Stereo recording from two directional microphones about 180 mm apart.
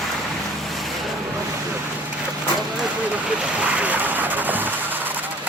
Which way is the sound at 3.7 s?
10° right (ahead or behind).